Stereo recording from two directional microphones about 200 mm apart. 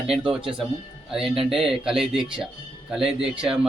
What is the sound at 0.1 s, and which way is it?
Speech, centre (ahead or behind).